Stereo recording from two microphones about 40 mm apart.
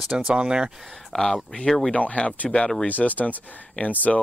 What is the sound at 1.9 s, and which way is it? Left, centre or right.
Speech, left.